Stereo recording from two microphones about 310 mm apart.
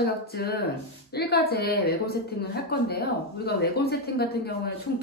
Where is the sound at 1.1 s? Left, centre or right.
Left.